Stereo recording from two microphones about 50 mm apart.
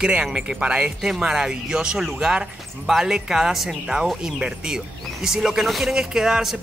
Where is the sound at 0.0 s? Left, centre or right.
Centre.